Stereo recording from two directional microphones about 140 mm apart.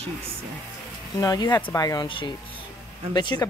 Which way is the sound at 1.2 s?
30° left (ahead or behind).